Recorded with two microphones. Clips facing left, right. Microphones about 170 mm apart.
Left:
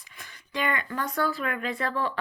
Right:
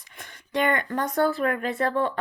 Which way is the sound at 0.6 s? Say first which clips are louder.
Right 4 dB; 50° right (ahead or behind).